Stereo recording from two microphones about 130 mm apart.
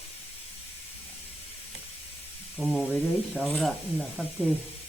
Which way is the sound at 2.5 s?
5° right (ahead or behind).